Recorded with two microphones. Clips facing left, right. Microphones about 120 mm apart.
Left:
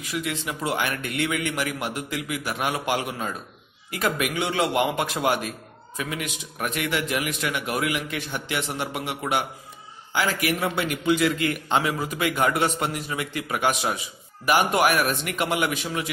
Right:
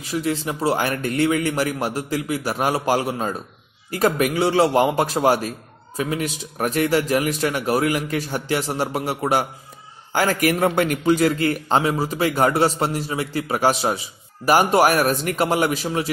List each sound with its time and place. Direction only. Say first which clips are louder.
0.1 s a man's voice: right 6 dB; 35° right (ahead or behind)